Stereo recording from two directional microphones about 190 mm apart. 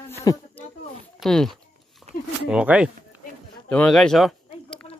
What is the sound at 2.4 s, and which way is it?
Speech, 5° right (ahead or behind).